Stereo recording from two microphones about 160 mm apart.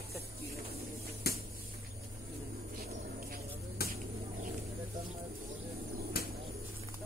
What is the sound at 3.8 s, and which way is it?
Vehicle, 75° left (ahead or behind).